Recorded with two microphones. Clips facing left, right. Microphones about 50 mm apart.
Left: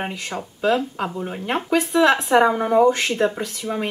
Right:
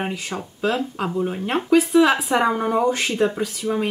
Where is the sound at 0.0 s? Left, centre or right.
Centre.